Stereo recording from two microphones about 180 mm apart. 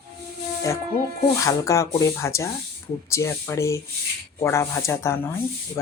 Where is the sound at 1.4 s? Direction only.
15° left (ahead or behind).